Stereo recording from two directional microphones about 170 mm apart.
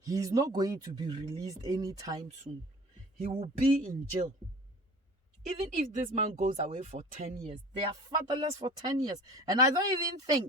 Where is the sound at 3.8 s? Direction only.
50° right (ahead or behind).